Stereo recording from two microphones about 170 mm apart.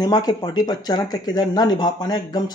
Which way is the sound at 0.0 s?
25° left (ahead or behind).